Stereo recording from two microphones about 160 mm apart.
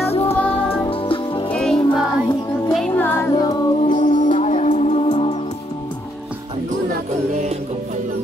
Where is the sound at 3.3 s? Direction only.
25° left (ahead or behind).